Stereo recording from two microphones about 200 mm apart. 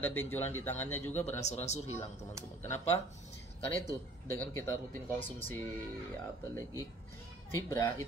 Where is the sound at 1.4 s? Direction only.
35° left (ahead or behind).